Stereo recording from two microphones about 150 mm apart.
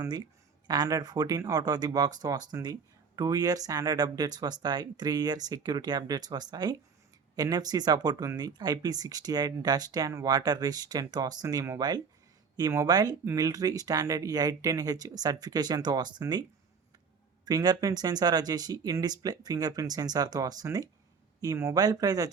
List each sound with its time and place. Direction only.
0.0 s speech: 25° right (ahead or behind)
17.4 s speech: 25° right (ahead or behind)